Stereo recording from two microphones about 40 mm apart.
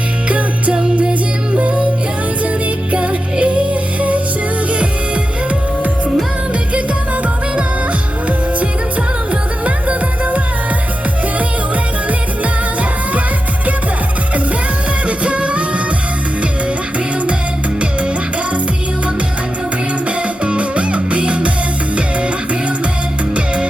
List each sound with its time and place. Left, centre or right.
0.3 s music: right
2.9 s music: right
6.5 s music: right
9.3 s music: right
15.0 s music: right
20.1 s music: right